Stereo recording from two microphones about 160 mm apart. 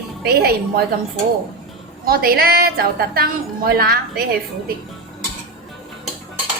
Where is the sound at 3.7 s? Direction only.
70° right (ahead or behind).